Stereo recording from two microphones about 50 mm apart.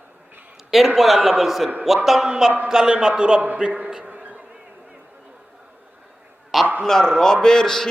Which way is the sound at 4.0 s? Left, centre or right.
Right.